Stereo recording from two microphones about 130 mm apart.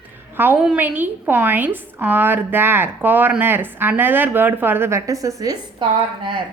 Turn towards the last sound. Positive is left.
turn(degrees=-40)  # may be behind; listen again after turning